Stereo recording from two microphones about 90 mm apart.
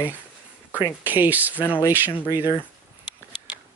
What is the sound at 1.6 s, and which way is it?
Speech, 20° left (ahead or behind).